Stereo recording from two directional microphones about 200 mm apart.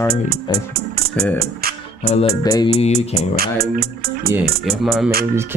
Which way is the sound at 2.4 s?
20° left (ahead or behind).